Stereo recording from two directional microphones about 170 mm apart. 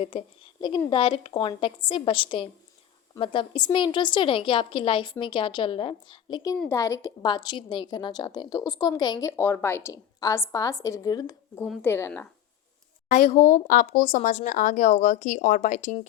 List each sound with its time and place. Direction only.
0.9 s a woman's voice: 30° left (ahead or behind); by 12.3 s 15° left (ahead or behind)
13.1 s speech: 50° left (ahead or behind)